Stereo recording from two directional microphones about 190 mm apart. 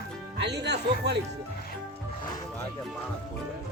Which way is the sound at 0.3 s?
65° right (ahead or behind).